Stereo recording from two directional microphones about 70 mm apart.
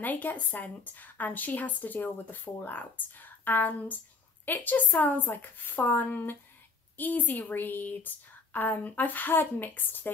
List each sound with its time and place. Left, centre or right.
0.0 s a woman's voice: left